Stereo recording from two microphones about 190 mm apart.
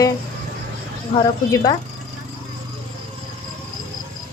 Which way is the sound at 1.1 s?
20° left (ahead or behind).